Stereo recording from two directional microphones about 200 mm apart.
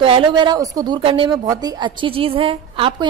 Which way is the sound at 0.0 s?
25° right (ahead or behind).